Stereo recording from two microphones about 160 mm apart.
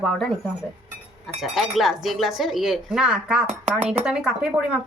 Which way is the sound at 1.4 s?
Centre (ahead or behind).